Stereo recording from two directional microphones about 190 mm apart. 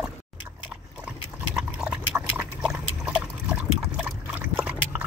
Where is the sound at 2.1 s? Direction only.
5° right (ahead or behind).